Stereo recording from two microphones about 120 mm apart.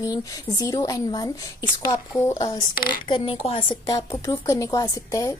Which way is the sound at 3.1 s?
45° left (ahead or behind).